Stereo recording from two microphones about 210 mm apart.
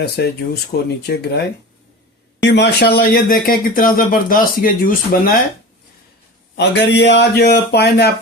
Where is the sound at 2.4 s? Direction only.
55° left (ahead or behind).